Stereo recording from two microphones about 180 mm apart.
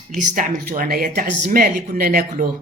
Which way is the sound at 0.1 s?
45° right (ahead or behind).